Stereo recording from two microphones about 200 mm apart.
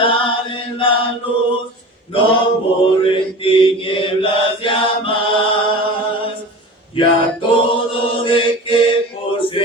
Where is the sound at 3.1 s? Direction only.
25° left (ahead or behind).